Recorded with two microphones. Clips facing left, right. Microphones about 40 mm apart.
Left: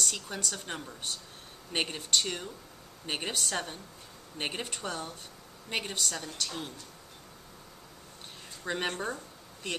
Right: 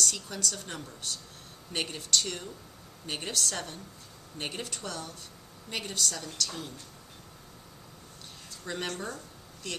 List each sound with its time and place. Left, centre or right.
0.0 s a woman's voice: centre
8.6 s a woman's voice: left